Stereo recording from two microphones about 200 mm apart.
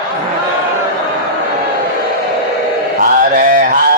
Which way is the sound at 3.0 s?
45° right (ahead or behind).